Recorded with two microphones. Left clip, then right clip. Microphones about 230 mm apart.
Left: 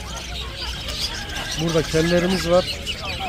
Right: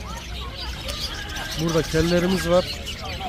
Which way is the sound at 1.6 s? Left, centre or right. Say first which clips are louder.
Left 2 dB; centre.